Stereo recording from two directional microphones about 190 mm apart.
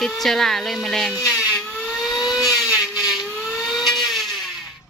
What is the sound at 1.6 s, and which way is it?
Whir, 10° left (ahead or behind).